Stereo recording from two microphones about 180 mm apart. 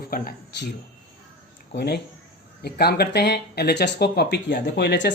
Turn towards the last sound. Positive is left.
turn(degrees=70)  # may be behind; listen again after turning